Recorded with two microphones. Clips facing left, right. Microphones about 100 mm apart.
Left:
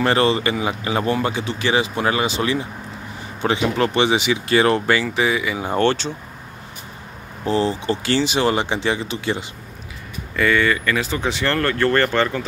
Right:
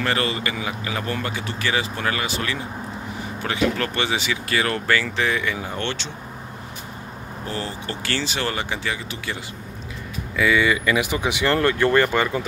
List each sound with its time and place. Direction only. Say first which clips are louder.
0.0 s speech: left 6 dB; 30° left (ahead or behind)
5.0 s speech: left 3 dB; 10° left (ahead or behind)
5.7 s speech: left 10 dB; 40° left (ahead or behind)
7.4 s speech: left 10 dB; 25° left (ahead or behind)
10.3 s speech: left 1 dB; 5° right (ahead or behind)